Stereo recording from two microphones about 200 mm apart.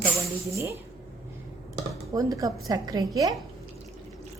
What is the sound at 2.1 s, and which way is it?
Speech, 15° right (ahead or behind).